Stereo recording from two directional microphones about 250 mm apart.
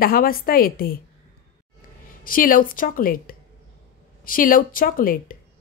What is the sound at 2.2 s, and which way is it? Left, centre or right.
A woman's voice, left.